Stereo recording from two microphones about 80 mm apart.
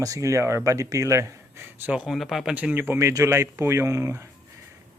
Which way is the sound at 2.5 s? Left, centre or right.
Right.